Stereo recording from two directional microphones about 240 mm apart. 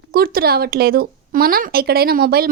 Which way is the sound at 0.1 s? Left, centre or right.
Right.